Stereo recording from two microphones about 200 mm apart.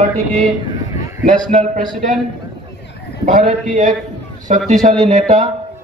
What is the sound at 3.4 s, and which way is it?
Speech, 35° right (ahead or behind).